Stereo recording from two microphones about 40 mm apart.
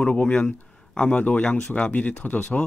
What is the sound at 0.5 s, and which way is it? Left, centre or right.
A man's voice, left.